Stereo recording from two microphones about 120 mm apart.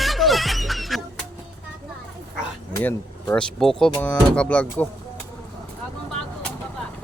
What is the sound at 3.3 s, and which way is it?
Speech, 5° left (ahead or behind).